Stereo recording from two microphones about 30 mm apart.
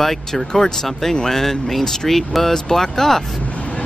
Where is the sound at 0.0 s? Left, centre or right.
Centre.